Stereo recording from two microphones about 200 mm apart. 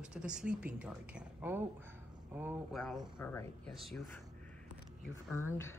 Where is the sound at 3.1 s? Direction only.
10° left (ahead or behind).